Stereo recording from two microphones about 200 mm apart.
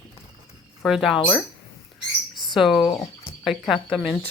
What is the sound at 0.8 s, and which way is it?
Speech, centre (ahead or behind).